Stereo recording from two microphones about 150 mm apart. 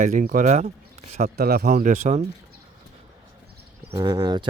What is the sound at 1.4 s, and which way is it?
Speech, 90° right.